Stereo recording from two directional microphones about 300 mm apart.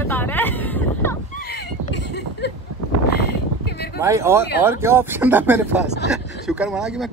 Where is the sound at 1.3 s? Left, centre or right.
Left.